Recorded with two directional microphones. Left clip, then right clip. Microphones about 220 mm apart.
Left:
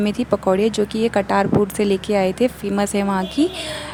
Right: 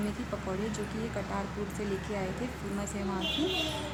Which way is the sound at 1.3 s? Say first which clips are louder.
Left 19 dB; 45° left (ahead or behind).